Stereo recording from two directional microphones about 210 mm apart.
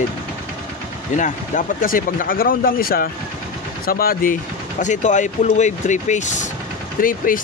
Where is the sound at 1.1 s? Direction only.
35° left (ahead or behind).